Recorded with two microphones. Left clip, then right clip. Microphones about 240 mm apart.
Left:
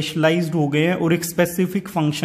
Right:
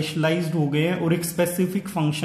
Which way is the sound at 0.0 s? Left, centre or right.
Left.